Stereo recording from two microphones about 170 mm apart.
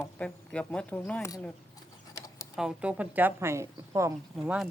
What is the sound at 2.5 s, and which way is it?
Speech, 5° right (ahead or behind).